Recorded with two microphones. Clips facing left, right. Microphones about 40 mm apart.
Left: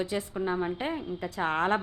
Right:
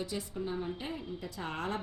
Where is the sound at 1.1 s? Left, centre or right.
Left.